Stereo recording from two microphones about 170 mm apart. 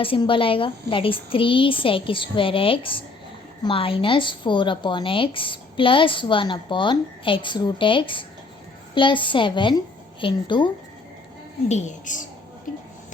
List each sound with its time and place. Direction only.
0.0 s a woman's voice: 30° left (ahead or behind)
11.7 s speech: 45° left (ahead or behind)